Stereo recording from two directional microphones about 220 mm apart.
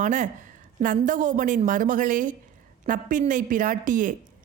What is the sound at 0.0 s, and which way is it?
A woman's voice, 35° right (ahead or behind).